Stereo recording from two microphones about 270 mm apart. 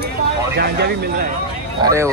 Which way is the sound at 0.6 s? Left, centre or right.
Right.